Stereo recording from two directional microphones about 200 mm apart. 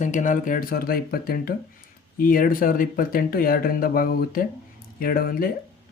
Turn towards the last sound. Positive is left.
turn(degrees=50)  # may be behind; listen again after turning